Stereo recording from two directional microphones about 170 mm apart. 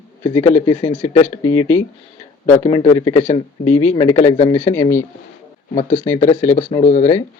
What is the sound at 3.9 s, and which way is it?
Speech, 25° left (ahead or behind).